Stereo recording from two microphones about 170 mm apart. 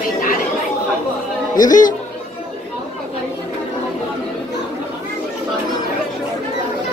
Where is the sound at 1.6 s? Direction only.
50° left (ahead or behind).